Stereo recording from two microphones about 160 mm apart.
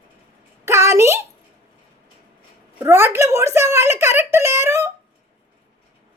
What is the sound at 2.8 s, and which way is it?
Speech, 15° right (ahead or behind).